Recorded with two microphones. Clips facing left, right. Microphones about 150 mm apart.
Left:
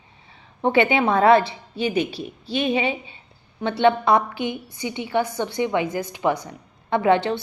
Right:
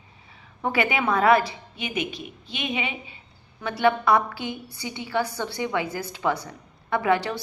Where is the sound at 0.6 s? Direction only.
25° left (ahead or behind).